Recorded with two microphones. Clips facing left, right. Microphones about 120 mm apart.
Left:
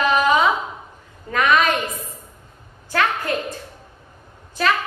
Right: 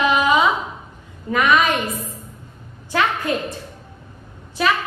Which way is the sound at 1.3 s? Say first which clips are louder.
Right 1 dB; 10° right (ahead or behind).